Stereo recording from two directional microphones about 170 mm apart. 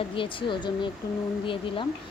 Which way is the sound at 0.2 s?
30° left (ahead or behind).